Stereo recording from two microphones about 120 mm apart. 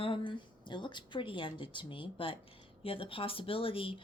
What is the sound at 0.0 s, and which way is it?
A woman's voice, 45° left (ahead or behind).